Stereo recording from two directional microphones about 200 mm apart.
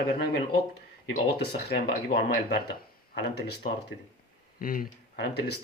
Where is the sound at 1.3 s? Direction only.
50° left (ahead or behind).